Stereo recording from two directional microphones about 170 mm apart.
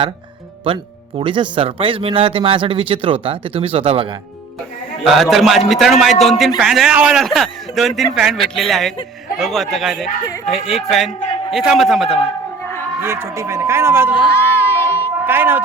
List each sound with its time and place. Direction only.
1.2 s a man's voice: 30° right (ahead or behind)
5.0 s speech: centre (ahead or behind)
13.0 s speech: 15° right (ahead or behind)
14.3 s crowd: 15° left (ahead or behind)
15.3 s speech: 10° right (ahead or behind)